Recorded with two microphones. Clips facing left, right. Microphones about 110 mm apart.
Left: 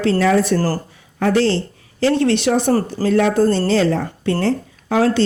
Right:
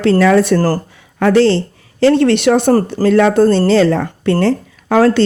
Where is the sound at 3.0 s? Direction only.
80° right.